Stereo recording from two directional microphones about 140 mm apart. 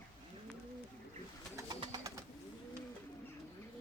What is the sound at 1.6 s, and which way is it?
Bird, 30° right (ahead or behind).